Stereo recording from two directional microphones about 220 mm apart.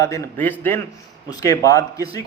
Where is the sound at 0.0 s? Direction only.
15° left (ahead or behind).